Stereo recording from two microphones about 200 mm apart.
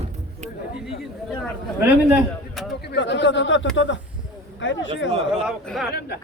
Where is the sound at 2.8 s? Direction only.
60° left (ahead or behind).